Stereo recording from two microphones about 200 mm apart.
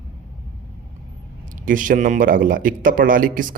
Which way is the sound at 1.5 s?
40° right (ahead or behind).